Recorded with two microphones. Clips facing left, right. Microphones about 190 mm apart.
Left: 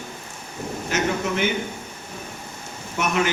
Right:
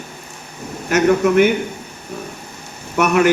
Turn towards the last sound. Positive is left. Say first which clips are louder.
# right 8 dB
turn(degrees=-65)  # may be behind; listen again after turning